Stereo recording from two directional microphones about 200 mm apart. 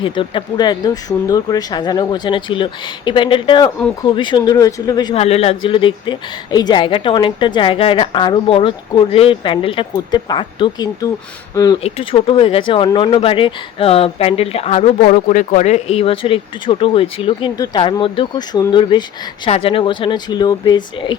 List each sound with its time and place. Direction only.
0.0 s speech: 25° left (ahead or behind)
5.1 s speech: 30° left (ahead or behind)
11.8 s speech: 30° left (ahead or behind)
15.0 s speech: 40° left (ahead or behind); by 21.2 s 20° left (ahead or behind)